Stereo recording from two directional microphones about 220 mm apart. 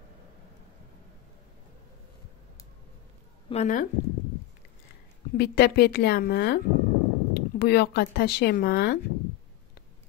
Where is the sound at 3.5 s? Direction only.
35° left (ahead or behind).